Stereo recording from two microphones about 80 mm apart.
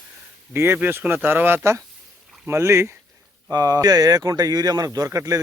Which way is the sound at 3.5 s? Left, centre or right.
Right.